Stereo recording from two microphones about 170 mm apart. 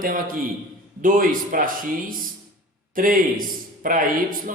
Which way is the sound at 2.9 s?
55° right (ahead or behind).